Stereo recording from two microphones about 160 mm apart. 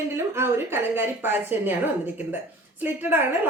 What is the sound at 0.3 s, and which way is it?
A woman's voice, 15° right (ahead or behind).